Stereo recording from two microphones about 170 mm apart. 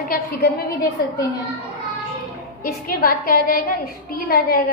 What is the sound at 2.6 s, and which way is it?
A woman's voice, 60° left (ahead or behind).